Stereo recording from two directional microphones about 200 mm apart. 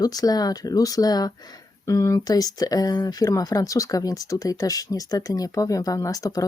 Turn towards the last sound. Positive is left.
turn(degrees=15)  # may be behind; listen again after turning